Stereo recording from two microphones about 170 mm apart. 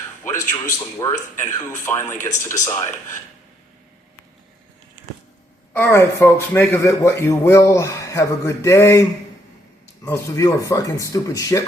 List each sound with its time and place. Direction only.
0.3 s a man's voice: 20° left (ahead or behind)
5.7 s a man's voice: 15° left (ahead or behind)
10.1 s speech: 20° left (ahead or behind)